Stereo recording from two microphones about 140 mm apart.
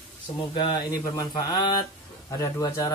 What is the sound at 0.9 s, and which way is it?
Speech, 25° left (ahead or behind).